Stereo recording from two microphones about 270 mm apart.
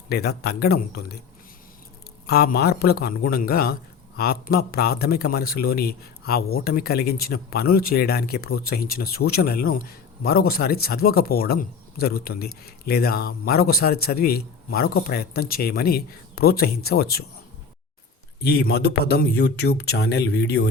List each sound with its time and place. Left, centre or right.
0.1 s a man's voice: left
2.2 s a man's voice: left
18.4 s a man's voice: left